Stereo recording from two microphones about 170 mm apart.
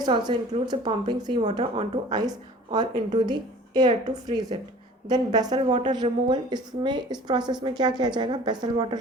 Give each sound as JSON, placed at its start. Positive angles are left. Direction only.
{"t": 0.0, "sound": "a woman's voice", "side_deg": -25}